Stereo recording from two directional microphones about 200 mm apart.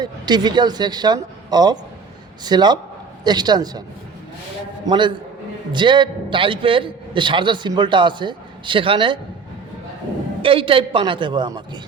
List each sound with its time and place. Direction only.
0.0 s a man's voice: 20° right (ahead or behind)
4.9 s a man's voice: 25° right (ahead or behind)
10.4 s a man's voice: 25° right (ahead or behind)